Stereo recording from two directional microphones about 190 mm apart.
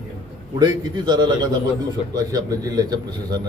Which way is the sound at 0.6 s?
25° right (ahead or behind).